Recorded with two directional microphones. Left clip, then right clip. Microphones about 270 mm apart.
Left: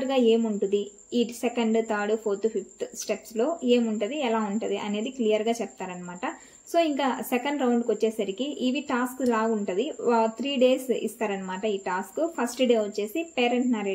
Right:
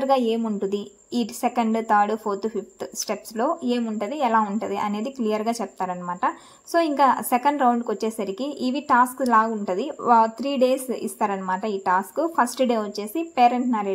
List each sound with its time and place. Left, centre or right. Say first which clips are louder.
0.0 s a woman's voice: right 1 dB; right